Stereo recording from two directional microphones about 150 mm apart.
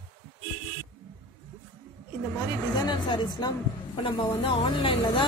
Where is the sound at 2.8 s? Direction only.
30° left (ahead or behind).